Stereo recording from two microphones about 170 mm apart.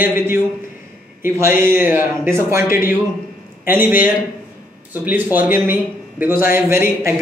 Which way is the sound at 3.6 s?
10° right (ahead or behind).